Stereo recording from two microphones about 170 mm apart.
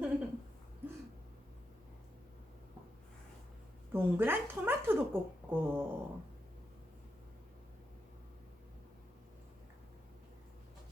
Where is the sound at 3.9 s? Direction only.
15° right (ahead or behind).